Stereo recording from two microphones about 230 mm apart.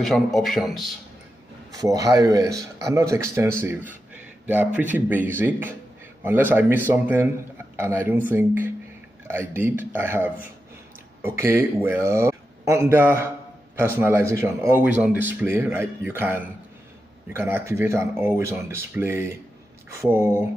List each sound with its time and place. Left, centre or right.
0.0 s a man's voice: centre
1.7 s speech: centre